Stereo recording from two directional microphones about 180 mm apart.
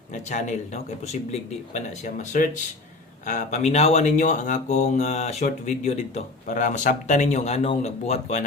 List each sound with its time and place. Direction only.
0.1 s speech: 45° left (ahead or behind)